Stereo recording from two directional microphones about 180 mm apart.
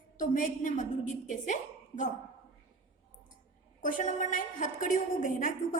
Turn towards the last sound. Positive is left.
turn(degrees=45)  # may be behind; listen again after turning